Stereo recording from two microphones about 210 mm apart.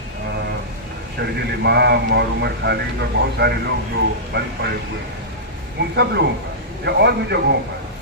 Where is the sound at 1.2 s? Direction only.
50° right (ahead or behind).